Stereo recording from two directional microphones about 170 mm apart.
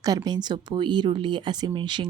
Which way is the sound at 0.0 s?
20° right (ahead or behind).